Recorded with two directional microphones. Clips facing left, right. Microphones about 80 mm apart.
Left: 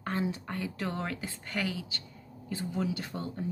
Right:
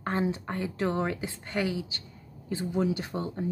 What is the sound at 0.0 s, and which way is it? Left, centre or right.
A woman's voice, right.